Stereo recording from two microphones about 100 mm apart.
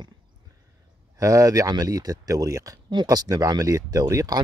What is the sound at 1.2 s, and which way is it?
Speech, 35° right (ahead or behind).